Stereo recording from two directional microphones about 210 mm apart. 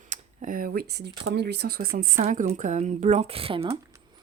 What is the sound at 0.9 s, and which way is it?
Speech, 55° right (ahead or behind).